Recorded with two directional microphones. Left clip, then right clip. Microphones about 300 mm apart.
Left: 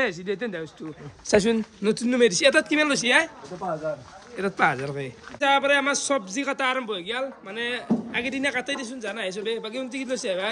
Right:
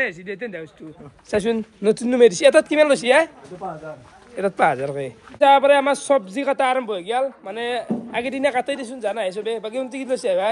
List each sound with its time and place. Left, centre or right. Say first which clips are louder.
0.0 s a man's voice: right 1 dB; centre
4.4 s a man's voice: right 4 dB; centre